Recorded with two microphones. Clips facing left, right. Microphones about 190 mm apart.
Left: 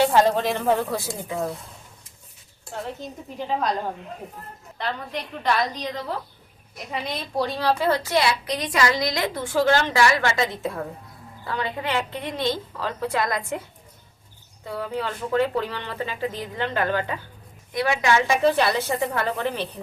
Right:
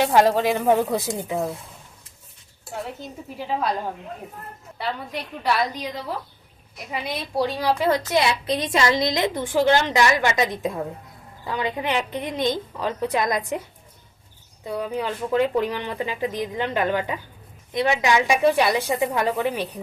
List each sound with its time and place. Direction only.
0.0 s speech: 15° right (ahead or behind)
3.3 s speech: 5° right (ahead or behind)
4.8 s a woman's voice: 5° right (ahead or behind)
14.6 s speech: 15° right (ahead or behind)